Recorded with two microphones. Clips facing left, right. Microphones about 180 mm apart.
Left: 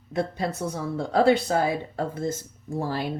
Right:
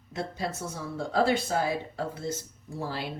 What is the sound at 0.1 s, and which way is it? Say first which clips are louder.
A woman's voice: left 6 dB; 55° left (ahead or behind).